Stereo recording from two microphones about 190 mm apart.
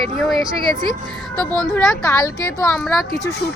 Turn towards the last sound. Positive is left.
turn(degrees=0)  # may be behind; listen again after turning